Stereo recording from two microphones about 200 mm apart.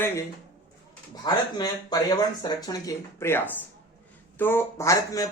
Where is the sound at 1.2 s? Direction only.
20° left (ahead or behind).